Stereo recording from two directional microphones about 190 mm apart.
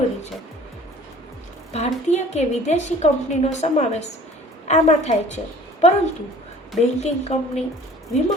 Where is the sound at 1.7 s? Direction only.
35° left (ahead or behind).